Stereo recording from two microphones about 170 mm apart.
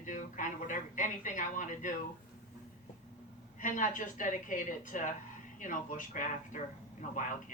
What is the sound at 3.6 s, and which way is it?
Speech, 50° left (ahead or behind).